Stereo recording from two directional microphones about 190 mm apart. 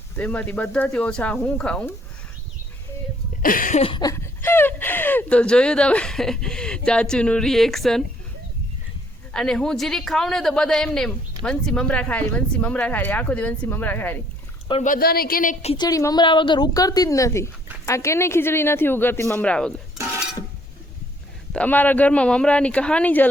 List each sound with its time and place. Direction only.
0.2 s speech: 10° left (ahead or behind)
3.4 s speech: 45° left (ahead or behind)
3.8 s a woman's voice: 25° left (ahead or behind)
4.1 s speech: 10° left (ahead or behind)
9.3 s a man's voice: 5° left (ahead or behind)
14.8 s speech: 50° left (ahead or behind)
15.7 s a woman's voice: 20° left (ahead or behind)
21.5 s speech: 10° left (ahead or behind)